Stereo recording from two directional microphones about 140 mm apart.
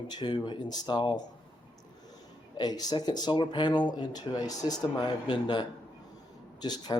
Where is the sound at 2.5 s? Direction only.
30° left (ahead or behind).